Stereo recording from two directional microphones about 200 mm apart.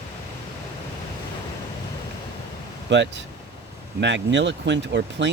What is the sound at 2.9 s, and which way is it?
Speech, 65° right (ahead or behind).